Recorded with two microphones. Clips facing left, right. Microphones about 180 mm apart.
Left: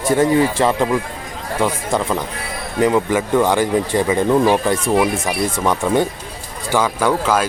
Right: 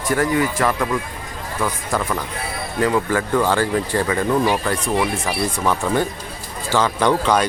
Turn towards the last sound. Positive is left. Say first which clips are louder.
# even
turn(degrees=5)  # may be behind; listen again after turning